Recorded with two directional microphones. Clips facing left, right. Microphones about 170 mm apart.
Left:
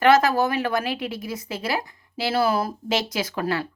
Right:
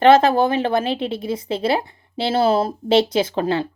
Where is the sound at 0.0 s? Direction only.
30° right (ahead or behind).